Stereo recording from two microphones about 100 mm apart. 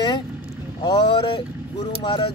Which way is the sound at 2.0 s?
50° left (ahead or behind).